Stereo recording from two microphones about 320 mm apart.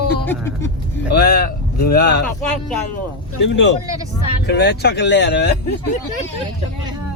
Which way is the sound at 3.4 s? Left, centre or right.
Left.